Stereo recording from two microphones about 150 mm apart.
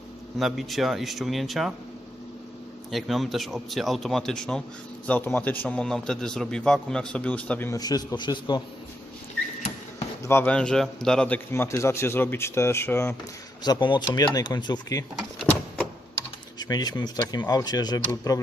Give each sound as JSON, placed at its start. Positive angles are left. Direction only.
{"t": 0.3, "sound": "speech", "side_deg": 0}
{"t": 2.9, "sound": "a man's voice", "side_deg": 0}
{"t": 7.7, "sound": "speech", "side_deg": 25}
{"t": 10.2, "sound": "a man's voice", "side_deg": 15}
{"t": 11.5, "sound": "a man's voice", "side_deg": 20}
{"t": 13.6, "sound": "speech", "side_deg": 30}
{"t": 16.6, "sound": "speech", "side_deg": 25}